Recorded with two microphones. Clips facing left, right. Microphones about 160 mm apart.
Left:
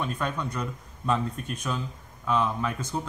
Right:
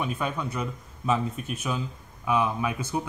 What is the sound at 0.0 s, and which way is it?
Speech, 5° right (ahead or behind).